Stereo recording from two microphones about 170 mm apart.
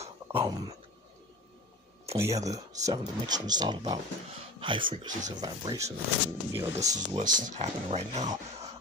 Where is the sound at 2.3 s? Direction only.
20° right (ahead or behind).